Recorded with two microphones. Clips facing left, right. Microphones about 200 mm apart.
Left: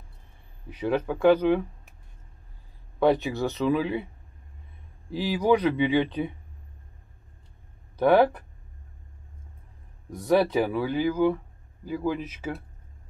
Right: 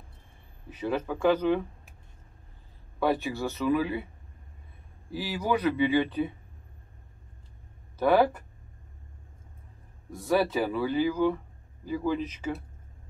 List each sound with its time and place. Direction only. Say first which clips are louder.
0.7 s speech: left 4 dB; 15° left (ahead or behind)
3.0 s speech: left 5 dB; 20° left (ahead or behind)
5.1 s speech: left 6 dB; 20° left (ahead or behind)
10.1 s speech: left 4 dB; 15° left (ahead or behind)